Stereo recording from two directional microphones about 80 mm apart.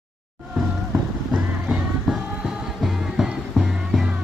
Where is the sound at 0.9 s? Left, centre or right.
Centre.